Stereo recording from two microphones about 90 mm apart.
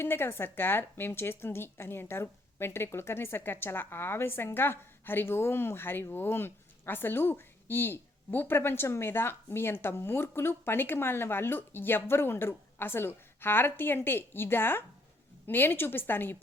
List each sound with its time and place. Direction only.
0.0 s a woman's voice: 25° left (ahead or behind)